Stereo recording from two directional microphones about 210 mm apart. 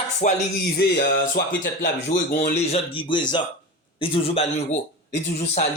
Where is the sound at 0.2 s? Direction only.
35° left (ahead or behind).